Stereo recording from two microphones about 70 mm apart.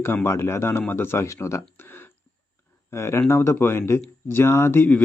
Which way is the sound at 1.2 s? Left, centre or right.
Left.